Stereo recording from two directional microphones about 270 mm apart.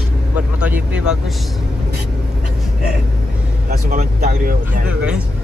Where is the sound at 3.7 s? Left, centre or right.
Right.